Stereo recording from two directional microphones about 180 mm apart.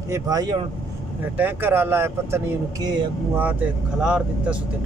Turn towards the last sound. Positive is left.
turn(degrees=-5)  # may be behind; listen again after turning